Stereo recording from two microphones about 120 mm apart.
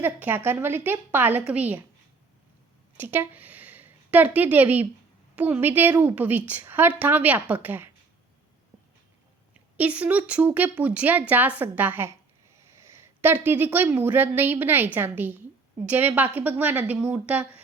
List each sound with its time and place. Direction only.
0.0 s a woman's voice: 15° right (ahead or behind)
3.0 s a woman's voice: 15° right (ahead or behind)
9.7 s a woman's voice: 10° right (ahead or behind)